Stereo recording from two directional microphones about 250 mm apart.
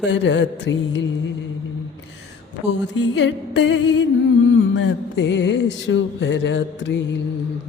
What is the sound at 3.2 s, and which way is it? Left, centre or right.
Music, left.